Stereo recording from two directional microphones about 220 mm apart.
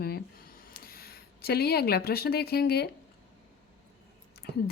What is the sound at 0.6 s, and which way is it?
Speech, 40° left (ahead or behind).